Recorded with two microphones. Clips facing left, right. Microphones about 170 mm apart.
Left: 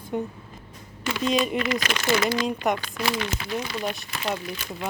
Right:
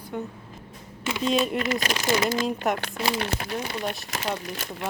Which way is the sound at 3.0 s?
30° right (ahead or behind).